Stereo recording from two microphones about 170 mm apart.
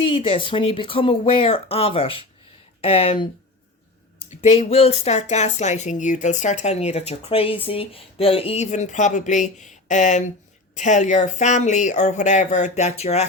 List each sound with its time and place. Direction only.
0.0 s speech: 30° left (ahead or behind)
4.3 s speech: 35° left (ahead or behind)